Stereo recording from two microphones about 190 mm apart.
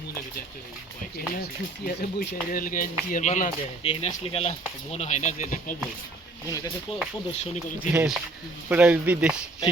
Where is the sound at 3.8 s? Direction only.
30° left (ahead or behind).